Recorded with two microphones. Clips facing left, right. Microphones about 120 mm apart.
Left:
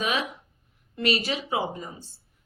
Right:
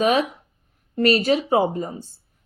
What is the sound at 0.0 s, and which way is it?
Speech, 40° right (ahead or behind).